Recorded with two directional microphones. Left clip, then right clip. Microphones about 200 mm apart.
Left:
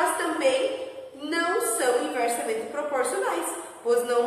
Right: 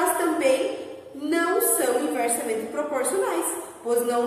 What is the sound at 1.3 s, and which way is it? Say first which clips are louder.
A woman's voice: right 2 dB; 5° right (ahead or behind).